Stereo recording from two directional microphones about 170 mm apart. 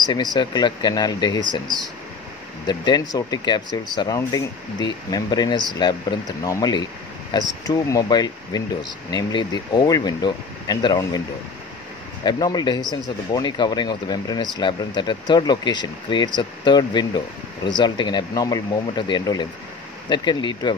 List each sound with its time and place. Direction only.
0.0 s speech: 25° left (ahead or behind)
12.3 s speech: 25° left (ahead or behind)